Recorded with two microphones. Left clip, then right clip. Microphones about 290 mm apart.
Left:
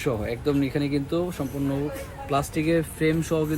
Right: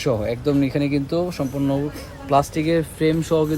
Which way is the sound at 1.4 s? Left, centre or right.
Right.